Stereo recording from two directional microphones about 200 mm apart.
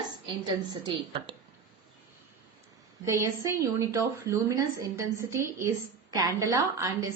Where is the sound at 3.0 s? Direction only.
15° right (ahead or behind).